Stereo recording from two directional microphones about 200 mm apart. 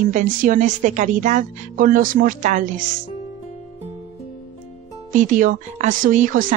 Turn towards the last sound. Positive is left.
turn(degrees=-40)  # may be behind; listen again after turning